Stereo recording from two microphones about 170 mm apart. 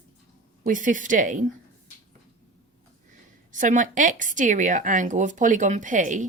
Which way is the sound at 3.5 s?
50° right (ahead or behind).